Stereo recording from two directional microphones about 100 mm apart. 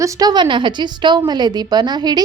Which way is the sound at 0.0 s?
40° right (ahead or behind).